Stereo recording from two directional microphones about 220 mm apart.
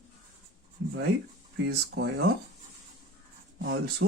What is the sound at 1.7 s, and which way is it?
Speech, 50° right (ahead or behind).